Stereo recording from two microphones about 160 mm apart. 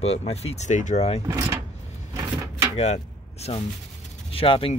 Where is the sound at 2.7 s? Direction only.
40° left (ahead or behind).